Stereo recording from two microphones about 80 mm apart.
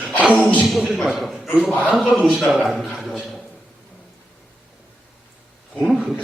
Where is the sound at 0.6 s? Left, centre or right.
Centre.